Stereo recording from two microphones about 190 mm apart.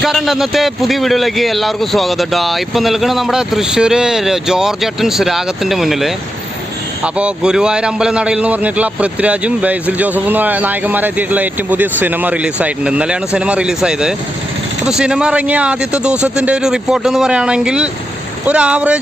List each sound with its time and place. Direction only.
0.0 s a man's voice: centre (ahead or behind)